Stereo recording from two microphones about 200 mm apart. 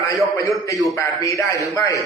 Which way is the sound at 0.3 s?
15° left (ahead or behind).